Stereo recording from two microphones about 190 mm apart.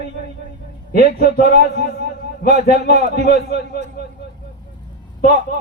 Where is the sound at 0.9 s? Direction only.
50° left (ahead or behind).